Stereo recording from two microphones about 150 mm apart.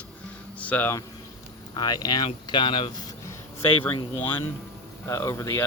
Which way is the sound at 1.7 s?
25° left (ahead or behind).